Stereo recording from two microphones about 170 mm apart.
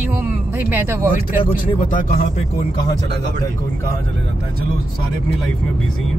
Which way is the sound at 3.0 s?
85° right.